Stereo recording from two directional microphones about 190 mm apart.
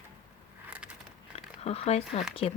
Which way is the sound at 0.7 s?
5° right (ahead or behind).